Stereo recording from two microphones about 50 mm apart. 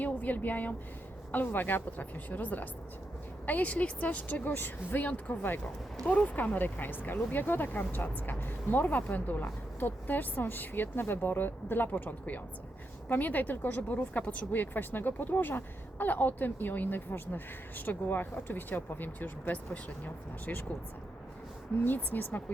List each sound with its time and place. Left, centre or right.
0.0 s speech: left
21.8 s speech: left